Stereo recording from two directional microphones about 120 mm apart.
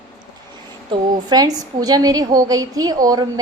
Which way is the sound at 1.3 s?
30° right (ahead or behind).